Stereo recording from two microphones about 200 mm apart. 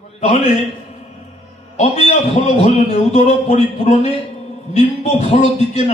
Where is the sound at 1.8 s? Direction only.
35° left (ahead or behind).